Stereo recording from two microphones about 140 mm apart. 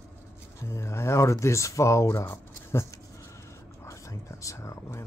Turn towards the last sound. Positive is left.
turn(degrees=20)  # may be behind; listen again after turning